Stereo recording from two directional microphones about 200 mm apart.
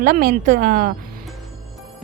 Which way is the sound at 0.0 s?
45° right (ahead or behind).